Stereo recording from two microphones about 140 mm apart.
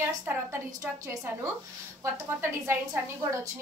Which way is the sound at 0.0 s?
15° right (ahead or behind).